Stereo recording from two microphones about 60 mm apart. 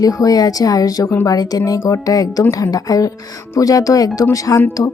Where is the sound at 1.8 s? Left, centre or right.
Left.